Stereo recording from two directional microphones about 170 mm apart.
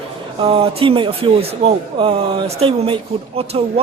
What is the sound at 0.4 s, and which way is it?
A man's voice, 35° right (ahead or behind).